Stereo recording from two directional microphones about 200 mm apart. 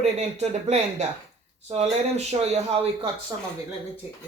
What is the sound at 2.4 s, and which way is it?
Speech, 30° right (ahead or behind).